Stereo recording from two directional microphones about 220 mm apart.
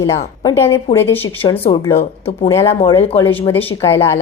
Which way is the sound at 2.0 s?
30° left (ahead or behind).